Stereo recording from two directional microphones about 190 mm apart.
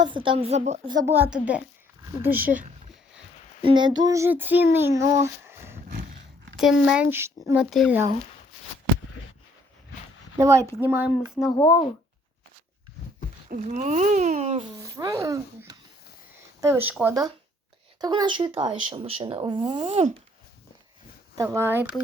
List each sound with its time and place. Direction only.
0.0 s a child's voice: 25° right (ahead or behind)
0.9 s speech: 20° right (ahead or behind)
1.1 s speech: 10° right (ahead or behind)
3.6 s speech: 25° right (ahead or behind)
6.8 s speech: 5° right (ahead or behind)
7.6 s speech: centre (ahead or behind)
10.3 s speech: 15° right (ahead or behind)
11.5 s speech: 15° left (ahead or behind)
13.5 s a child's voice: 40° right (ahead or behind)
14.8 s a child's voice: 15° right (ahead or behind)
18.0 s speech: 20° right (ahead or behind)
21.3 s speech: 15° right (ahead or behind)